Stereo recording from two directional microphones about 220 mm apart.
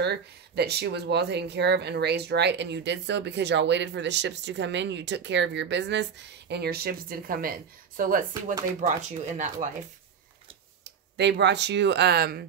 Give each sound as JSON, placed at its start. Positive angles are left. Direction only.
{"t": 0.0, "sound": "speech", "side_deg": -50}
{"t": 10.8, "sound": "speech", "side_deg": -50}